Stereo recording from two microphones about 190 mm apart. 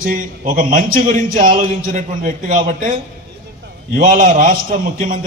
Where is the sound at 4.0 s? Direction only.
45° right (ahead or behind).